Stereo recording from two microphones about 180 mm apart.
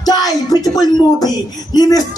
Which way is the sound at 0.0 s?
20° left (ahead or behind).